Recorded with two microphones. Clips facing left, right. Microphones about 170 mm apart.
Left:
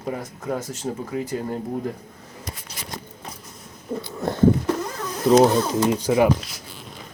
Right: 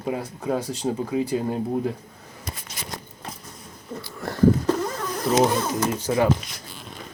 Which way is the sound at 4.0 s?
20° left (ahead or behind).